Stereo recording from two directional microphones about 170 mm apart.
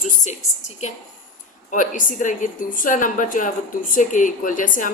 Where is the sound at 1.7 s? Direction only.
50° left (ahead or behind).